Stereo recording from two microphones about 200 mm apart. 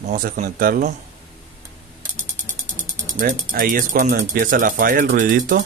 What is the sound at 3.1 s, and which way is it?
Speech, 40° right (ahead or behind).